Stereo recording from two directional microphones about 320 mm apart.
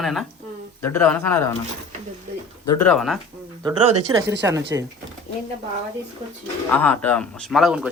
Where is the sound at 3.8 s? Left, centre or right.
Right.